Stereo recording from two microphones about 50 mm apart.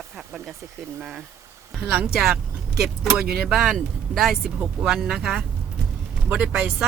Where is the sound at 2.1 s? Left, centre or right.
Centre.